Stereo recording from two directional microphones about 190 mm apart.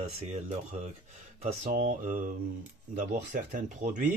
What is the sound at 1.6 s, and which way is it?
Mantra, 40° right (ahead or behind).